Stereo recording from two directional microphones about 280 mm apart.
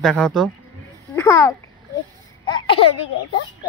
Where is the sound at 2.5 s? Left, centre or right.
Centre.